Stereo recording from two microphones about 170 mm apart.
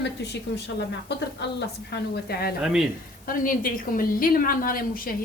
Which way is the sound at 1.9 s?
75° left (ahead or behind).